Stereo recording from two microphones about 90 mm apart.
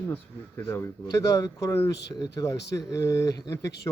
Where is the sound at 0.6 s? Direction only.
35° left (ahead or behind).